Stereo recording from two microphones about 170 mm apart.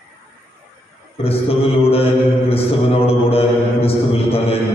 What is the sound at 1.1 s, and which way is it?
Mantra, 35° left (ahead or behind).